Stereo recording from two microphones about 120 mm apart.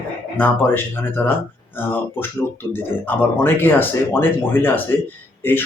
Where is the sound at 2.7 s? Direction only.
15° left (ahead or behind).